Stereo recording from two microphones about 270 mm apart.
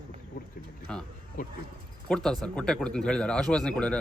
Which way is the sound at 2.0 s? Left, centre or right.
Centre.